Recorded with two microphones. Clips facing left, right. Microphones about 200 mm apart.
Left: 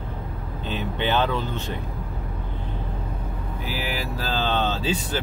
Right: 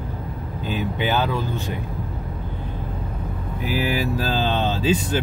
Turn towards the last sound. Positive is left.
turn(degrees=-15)  # may be behind; listen again after turning